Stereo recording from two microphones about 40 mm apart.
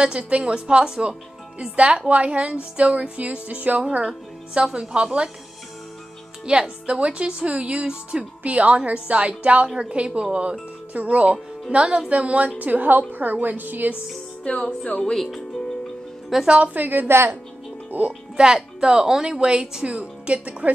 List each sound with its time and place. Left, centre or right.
0.0 s a woman's voice: right
4.7 s a woman's voice: right
6.5 s a woman's voice: right
11.7 s a woman's voice: right
12.1 s speech: right
12.5 s a woman's voice: right
14.5 s speech: left
16.4 s a woman's voice: right
16.7 s a woman's voice: right
17.1 s a woman's voice: right
17.9 s a woman's voice: right
18.5 s a woman's voice: centre
19.9 s speech: right